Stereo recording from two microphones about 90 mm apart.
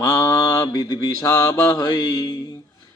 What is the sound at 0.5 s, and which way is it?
Mantra, 40° left (ahead or behind).